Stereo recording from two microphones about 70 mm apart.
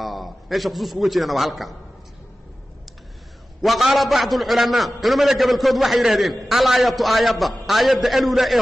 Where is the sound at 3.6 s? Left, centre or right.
Centre.